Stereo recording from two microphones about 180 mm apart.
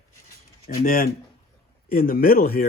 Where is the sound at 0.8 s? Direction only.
50° left (ahead or behind).